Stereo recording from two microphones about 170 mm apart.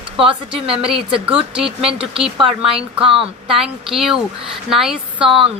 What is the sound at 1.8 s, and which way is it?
Speech, 30° right (ahead or behind).